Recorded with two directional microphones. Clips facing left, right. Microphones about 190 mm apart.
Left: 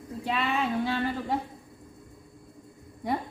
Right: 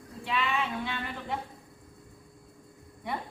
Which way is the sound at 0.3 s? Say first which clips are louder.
Left 3 dB; 40° left (ahead or behind).